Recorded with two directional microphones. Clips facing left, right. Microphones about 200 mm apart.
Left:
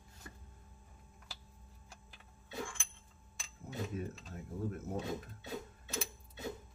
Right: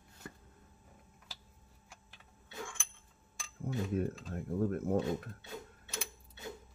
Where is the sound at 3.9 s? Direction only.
60° right (ahead or behind).